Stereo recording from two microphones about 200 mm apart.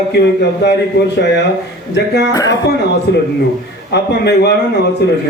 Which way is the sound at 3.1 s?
55° left (ahead or behind).